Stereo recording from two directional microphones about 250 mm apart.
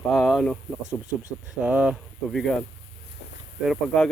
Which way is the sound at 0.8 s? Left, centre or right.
Right.